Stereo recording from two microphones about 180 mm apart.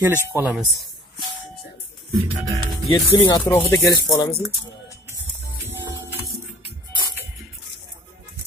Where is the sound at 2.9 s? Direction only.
20° left (ahead or behind).